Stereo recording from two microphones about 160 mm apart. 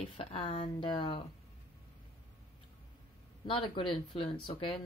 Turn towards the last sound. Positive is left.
turn(degrees=35)  # may be behind; listen again after turning